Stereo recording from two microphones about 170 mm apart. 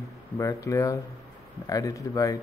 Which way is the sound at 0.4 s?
20° left (ahead or behind).